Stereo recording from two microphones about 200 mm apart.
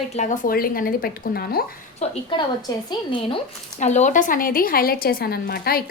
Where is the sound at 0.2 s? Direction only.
40° left (ahead or behind).